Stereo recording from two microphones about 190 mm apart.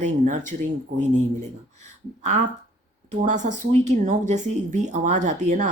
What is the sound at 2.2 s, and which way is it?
Speech, 40° right (ahead or behind).